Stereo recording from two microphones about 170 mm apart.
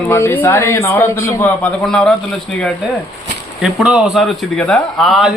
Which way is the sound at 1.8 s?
Centre (ahead or behind).